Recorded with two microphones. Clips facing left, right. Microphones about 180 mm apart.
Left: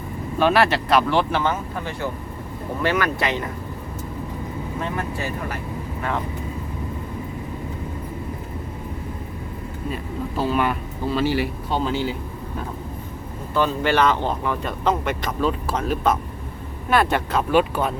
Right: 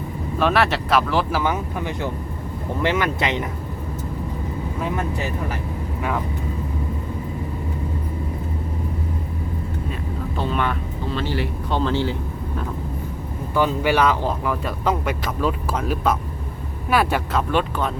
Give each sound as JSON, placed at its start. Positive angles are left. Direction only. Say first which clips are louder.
{"t": 0.3, "sound": "speech", "louder": "left 2 dB", "side_deg": 0}
{"t": 1.5, "sound": "speech", "louder": "right 2 dB", "side_deg": -15}
{"t": 4.8, "sound": "speech", "louder": "right 2 dB", "side_deg": -15}
{"t": 10.3, "sound": "speech", "louder": "left 2 dB", "side_deg": 5}
{"t": 13.5, "sound": "speech", "louder": "right 1 dB", "side_deg": -10}
{"t": 17.5, "sound": "speech", "louder": "left 5 dB", "side_deg": 10}